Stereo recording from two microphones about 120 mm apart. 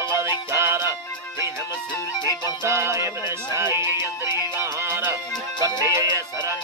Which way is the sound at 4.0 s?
35° left (ahead or behind).